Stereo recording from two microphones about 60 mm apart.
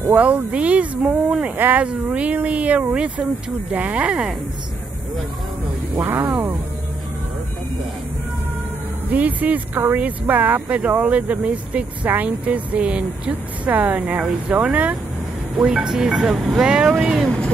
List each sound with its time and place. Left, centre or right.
0.1 s speech: right
5.9 s speech: right
9.1 s speech: right
15.5 s speech: centre